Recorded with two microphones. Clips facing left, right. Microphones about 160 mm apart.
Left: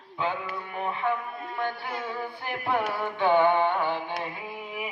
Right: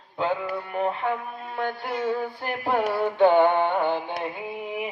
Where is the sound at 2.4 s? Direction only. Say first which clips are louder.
Left 1 dB; 35° right (ahead or behind).